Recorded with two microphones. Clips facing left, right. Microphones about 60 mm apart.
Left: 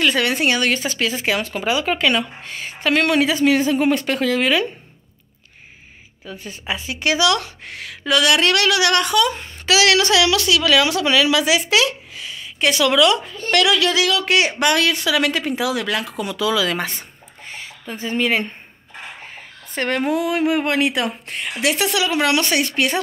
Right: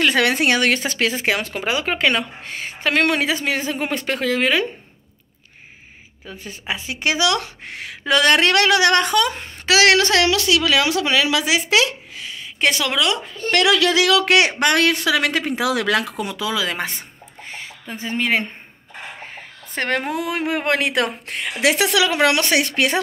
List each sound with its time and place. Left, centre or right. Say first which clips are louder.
0.1 s a woman's voice: right 1 dB; right
1.6 s speech: left 1 dB; right
6.3 s a woman's voice: left 1 dB; centre
6.7 s speech: left 1 dB; right
8.2 s speech: right 1 dB; right
14.0 s speech: right 2 dB; right
14.6 s a woman's voice: right 1 dB; right
15.7 s speech: right 3 dB; right
16.2 s speech: left 3 dB; right
17.5 s a sound: left 1 dB; right
20.0 s speech: left 4 dB; right